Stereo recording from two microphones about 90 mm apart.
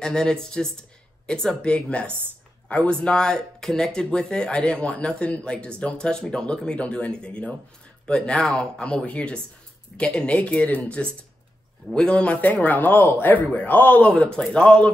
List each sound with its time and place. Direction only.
0.0 s speech: 10° left (ahead or behind)